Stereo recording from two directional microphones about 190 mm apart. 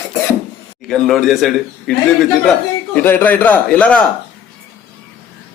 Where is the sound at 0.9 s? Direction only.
Centre (ahead or behind).